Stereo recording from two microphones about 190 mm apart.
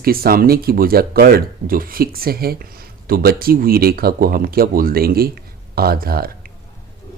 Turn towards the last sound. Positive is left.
turn(degrees=-50)  # may be behind; listen again after turning